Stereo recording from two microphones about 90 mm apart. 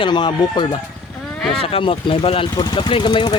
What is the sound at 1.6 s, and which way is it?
Speech, 90° left.